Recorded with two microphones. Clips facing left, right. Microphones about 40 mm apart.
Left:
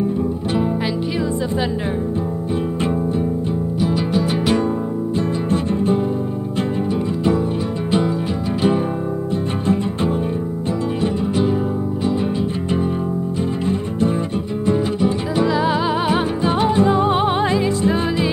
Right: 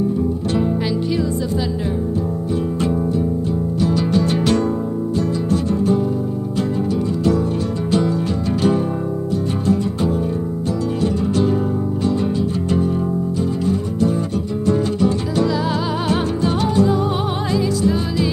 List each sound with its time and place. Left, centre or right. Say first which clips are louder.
3.8 s music: right 2 dB; centre
5.5 s music: right 1 dB; left
11.0 s music: right 2 dB; centre
14.7 s music: right 1 dB; centre